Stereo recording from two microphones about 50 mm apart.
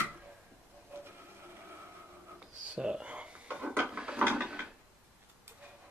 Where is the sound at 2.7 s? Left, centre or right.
Centre.